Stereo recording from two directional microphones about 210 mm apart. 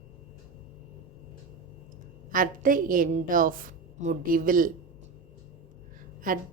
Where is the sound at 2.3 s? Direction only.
40° right (ahead or behind).